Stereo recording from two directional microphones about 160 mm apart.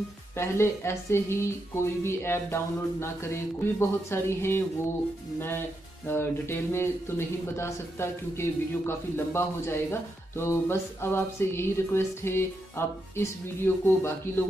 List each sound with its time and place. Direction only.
0.4 s speech: 15° left (ahead or behind)
6.0 s speech: 15° left (ahead or behind)